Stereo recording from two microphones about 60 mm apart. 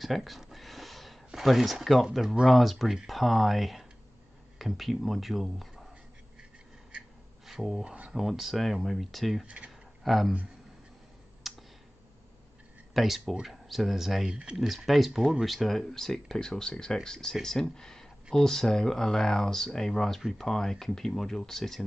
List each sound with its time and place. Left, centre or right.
0.0 s a sound: centre
2.4 s speech: centre
7.4 s speech: centre
7.8 s speech: right
8.1 s speech: centre
11.4 s clicking: centre
12.9 s speech: centre
14.3 s speech: centre
14.7 s speech: centre
20.2 s speech: centre
20.4 s speech: centre